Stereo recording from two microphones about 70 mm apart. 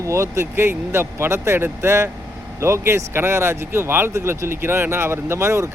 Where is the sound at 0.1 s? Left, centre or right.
Right.